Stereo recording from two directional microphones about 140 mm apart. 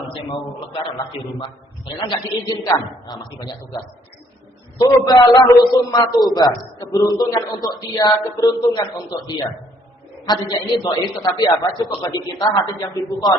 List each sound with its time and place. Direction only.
0.2 s a man's voice: 35° left (ahead or behind)
4.8 s speech: 30° left (ahead or behind)
10.5 s speech: 25° left (ahead or behind)